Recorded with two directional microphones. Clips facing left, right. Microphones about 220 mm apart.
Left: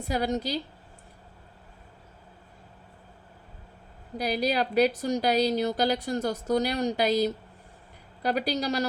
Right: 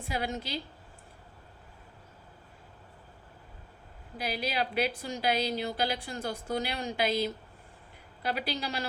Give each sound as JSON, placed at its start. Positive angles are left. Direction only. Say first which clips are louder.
{"t": 0.0, "sound": "a woman's voice", "louder": "left 7 dB", "side_deg": 40}
{"t": 4.2, "sound": "a woman's voice", "louder": "left 6 dB", "side_deg": 40}